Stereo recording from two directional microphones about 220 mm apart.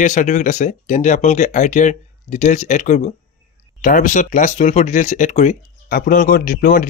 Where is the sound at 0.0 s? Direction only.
35° left (ahead or behind).